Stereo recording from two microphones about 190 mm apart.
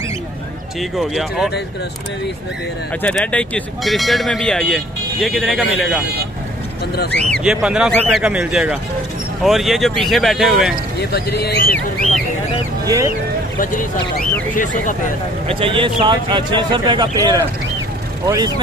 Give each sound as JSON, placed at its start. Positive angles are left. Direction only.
{"t": 0.7, "sound": "speech", "side_deg": 0}
{"t": 3.0, "sound": "speech", "side_deg": 5}
{"t": 7.3, "sound": "speech", "side_deg": -5}
{"t": 11.0, "sound": "speech", "side_deg": 55}
{"t": 12.8, "sound": "speech", "side_deg": -15}
{"t": 13.6, "sound": "speech", "side_deg": 45}
{"t": 15.4, "sound": "speech", "side_deg": -25}